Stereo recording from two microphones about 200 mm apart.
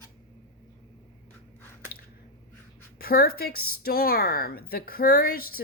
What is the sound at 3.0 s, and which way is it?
Speech, 50° left (ahead or behind).